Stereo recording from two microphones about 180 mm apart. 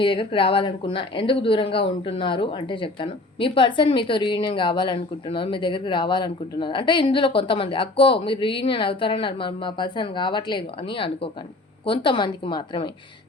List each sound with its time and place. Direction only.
0.0 s speech: 30° left (ahead or behind)